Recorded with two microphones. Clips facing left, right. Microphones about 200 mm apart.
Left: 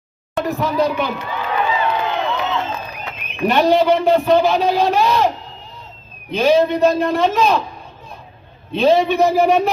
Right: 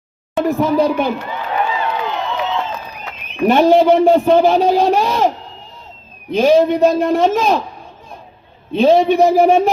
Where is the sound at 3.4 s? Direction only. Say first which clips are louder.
Right 4 dB; 50° right (ahead or behind).